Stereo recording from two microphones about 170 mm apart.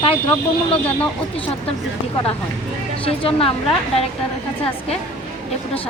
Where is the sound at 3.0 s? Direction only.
30° left (ahead or behind).